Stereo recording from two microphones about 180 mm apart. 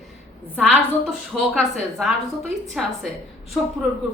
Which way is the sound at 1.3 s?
Centre (ahead or behind).